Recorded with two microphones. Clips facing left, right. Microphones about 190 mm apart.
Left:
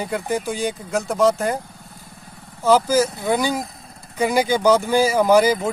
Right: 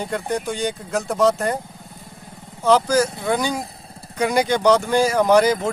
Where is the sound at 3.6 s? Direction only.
30° right (ahead or behind).